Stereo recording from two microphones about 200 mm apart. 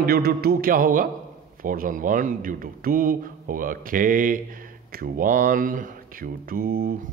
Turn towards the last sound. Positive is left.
turn(degrees=-50)  # may be behind; listen again after turning